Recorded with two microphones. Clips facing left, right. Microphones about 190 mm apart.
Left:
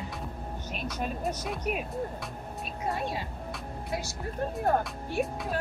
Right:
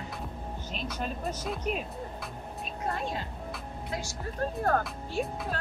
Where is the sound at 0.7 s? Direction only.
5° left (ahead or behind).